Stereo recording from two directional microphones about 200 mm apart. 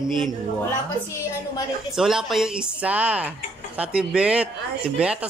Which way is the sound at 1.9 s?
Centre (ahead or behind).